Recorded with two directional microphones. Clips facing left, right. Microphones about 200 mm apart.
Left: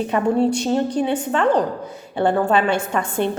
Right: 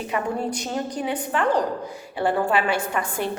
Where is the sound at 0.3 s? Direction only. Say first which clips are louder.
Left 9 dB; 25° left (ahead or behind).